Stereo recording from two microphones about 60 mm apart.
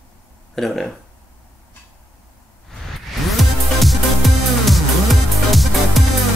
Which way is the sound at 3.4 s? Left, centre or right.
Centre.